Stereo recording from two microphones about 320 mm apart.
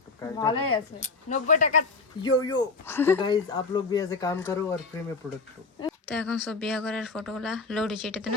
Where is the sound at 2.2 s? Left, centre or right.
Centre.